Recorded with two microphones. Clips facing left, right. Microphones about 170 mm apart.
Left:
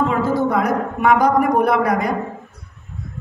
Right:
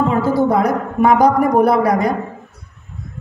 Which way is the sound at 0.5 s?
35° right (ahead or behind).